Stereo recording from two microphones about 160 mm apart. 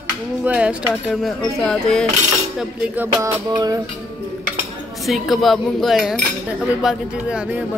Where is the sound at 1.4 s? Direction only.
5° left (ahead or behind).